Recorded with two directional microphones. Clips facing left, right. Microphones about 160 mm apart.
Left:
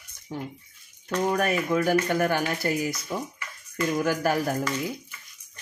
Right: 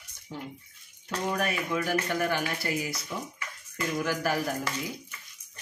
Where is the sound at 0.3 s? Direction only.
50° left (ahead or behind).